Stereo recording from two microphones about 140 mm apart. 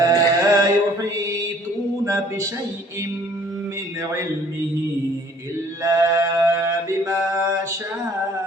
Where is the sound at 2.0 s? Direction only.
20° right (ahead or behind).